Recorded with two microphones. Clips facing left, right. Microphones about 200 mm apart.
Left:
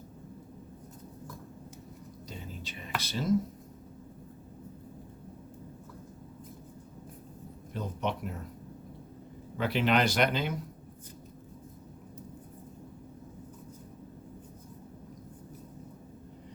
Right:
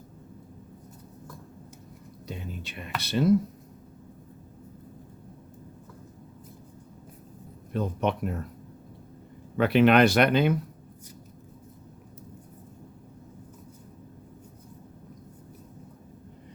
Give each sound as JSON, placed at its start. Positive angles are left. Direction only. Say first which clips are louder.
{"t": 2.2, "sound": "a sound", "louder": "right 6 dB", "side_deg": -65}
{"t": 3.0, "sound": "speech", "louder": "right 12 dB", "side_deg": -65}
{"t": 7.7, "sound": "speech", "louder": "right 7 dB", "side_deg": -60}
{"t": 9.6, "sound": "speech", "louder": "right 8 dB", "side_deg": -60}